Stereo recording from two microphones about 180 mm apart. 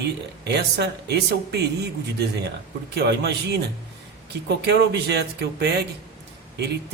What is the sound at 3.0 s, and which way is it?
Speech, 65° right (ahead or behind).